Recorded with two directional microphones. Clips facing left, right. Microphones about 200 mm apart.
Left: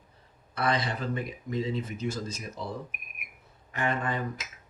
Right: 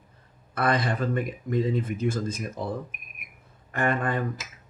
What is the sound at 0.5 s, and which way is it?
Speech, 50° right (ahead or behind).